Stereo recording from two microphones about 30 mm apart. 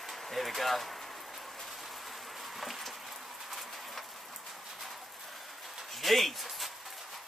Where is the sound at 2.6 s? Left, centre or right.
Centre.